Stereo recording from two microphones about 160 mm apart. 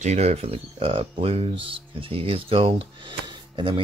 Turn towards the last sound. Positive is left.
turn(degrees=-30)  # may be behind; listen again after turning